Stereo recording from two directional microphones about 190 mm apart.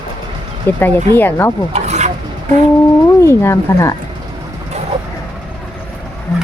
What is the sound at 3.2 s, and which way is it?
Speech, 15° left (ahead or behind).